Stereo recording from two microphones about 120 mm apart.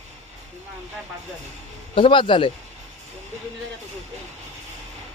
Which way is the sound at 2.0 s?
45° left (ahead or behind).